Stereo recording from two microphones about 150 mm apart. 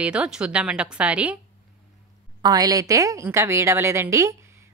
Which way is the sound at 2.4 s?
25° right (ahead or behind).